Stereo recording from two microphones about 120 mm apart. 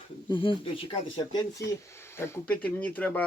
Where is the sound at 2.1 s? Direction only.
20° left (ahead or behind).